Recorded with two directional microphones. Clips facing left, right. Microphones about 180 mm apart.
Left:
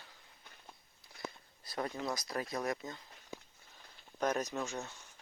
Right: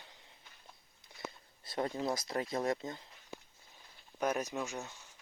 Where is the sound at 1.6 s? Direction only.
25° right (ahead or behind).